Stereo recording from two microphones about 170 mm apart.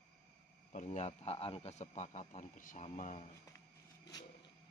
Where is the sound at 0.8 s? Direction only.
40° left (ahead or behind).